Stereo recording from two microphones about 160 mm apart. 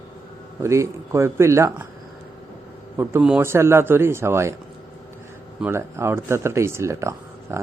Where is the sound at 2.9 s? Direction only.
15° right (ahead or behind).